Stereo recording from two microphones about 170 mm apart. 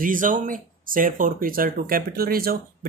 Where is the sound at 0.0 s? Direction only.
50° right (ahead or behind).